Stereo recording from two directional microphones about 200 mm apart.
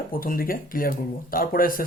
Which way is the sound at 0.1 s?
45° left (ahead or behind).